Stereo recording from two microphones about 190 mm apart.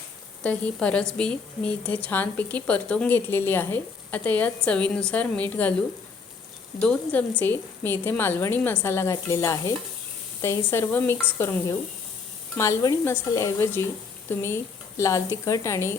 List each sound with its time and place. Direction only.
0.4 s a woman's voice: 5° left (ahead or behind)
6.8 s a woman's voice: 10° left (ahead or behind)